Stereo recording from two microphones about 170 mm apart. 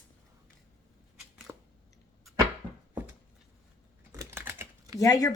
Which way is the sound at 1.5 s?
10° right (ahead or behind).